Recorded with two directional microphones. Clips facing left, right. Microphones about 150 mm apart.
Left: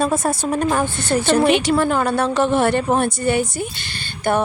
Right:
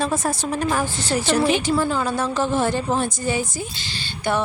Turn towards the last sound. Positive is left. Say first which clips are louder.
# left 3 dB
turn(degrees=55)  # may be behind; listen again after turning